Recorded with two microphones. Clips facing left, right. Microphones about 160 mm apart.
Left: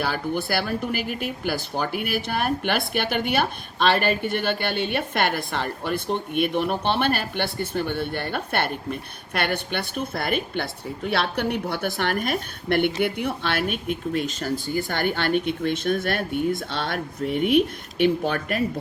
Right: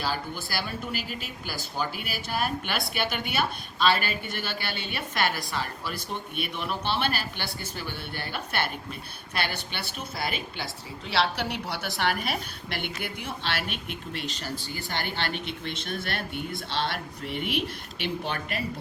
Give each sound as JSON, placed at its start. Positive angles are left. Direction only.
{"t": 0.0, "sound": "speech", "side_deg": 60}